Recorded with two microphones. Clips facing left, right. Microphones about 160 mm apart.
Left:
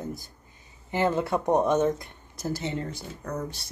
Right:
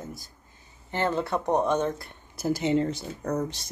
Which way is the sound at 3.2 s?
40° right (ahead or behind).